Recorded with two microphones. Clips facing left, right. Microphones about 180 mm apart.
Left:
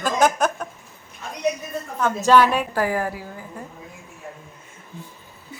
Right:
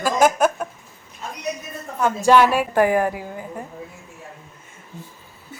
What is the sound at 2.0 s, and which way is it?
Speech, 10° right (ahead or behind).